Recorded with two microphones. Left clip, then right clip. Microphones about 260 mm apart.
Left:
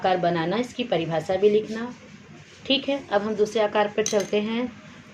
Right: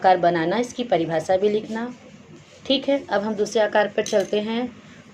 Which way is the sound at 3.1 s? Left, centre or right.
Centre.